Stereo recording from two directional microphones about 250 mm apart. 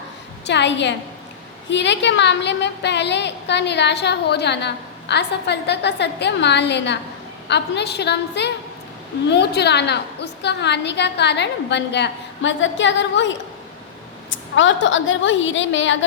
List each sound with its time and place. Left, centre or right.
0.4 s a woman's voice: left